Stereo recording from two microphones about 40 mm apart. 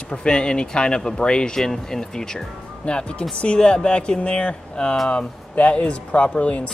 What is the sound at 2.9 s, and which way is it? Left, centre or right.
Speech, left.